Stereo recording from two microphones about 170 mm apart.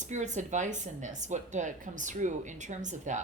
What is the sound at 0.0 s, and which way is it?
Speech, 45° right (ahead or behind).